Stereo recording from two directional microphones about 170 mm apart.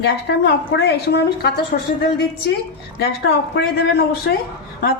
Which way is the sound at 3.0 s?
75° left (ahead or behind).